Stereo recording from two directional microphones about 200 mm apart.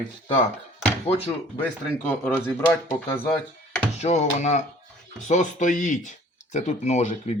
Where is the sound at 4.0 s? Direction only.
35° left (ahead or behind).